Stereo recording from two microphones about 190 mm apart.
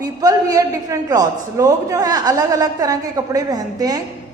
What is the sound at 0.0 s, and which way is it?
A woman's voice, 20° right (ahead or behind).